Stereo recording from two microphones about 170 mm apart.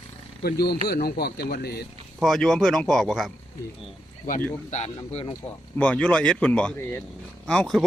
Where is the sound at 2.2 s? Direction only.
Centre (ahead or behind).